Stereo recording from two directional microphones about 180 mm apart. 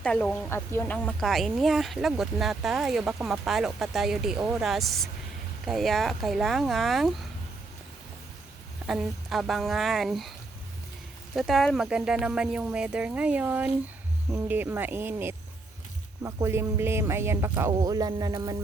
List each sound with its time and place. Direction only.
0.0 s speech: 5° left (ahead or behind)
8.9 s speech: centre (ahead or behind)
11.3 s speech: centre (ahead or behind); by 18.5 s 20° right (ahead or behind)